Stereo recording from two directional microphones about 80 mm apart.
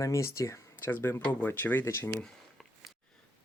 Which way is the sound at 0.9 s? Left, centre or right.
Left.